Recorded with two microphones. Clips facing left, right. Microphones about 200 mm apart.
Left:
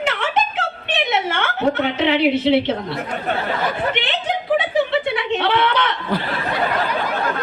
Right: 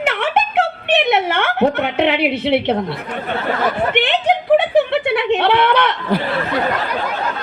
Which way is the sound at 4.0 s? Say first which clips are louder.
Right 7 dB; 60° right (ahead or behind).